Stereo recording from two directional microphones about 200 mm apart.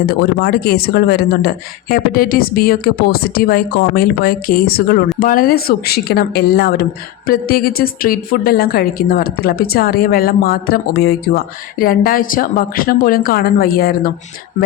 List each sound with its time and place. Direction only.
0.0 s a woman's voice: 50° left (ahead or behind)